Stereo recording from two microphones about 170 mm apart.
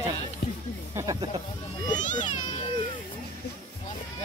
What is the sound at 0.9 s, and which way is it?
Snake, 20° right (ahead or behind).